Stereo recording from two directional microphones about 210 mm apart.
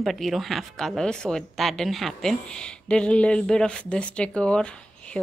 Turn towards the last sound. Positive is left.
turn(degrees=5)  # may be behind; listen again after turning